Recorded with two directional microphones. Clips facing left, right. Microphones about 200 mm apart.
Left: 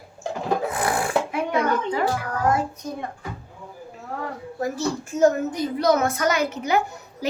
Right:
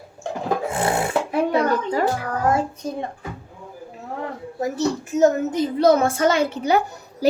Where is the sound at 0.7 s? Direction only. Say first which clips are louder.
Right 2 dB; 25° right (ahead or behind).